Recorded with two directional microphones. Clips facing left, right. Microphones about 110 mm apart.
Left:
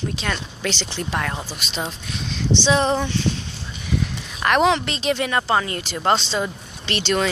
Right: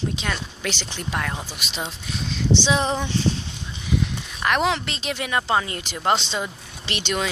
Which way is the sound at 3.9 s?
15° right (ahead or behind).